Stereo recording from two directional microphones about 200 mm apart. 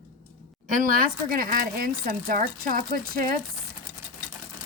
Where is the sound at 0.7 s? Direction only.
45° right (ahead or behind).